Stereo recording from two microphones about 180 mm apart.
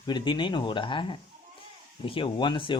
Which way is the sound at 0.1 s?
25° left (ahead or behind).